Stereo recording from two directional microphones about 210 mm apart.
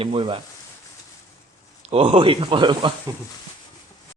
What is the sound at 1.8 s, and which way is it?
Speech, 30° right (ahead or behind).